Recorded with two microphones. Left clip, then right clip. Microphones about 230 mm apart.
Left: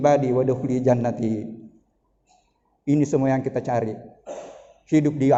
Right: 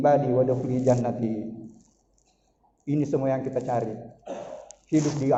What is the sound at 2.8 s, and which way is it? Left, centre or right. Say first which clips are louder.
A man's voice: left 4 dB; left.